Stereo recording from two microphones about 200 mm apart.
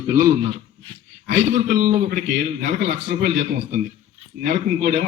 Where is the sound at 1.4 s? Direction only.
35° right (ahead or behind).